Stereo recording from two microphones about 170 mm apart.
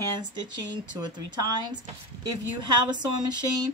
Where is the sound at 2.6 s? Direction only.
25° right (ahead or behind).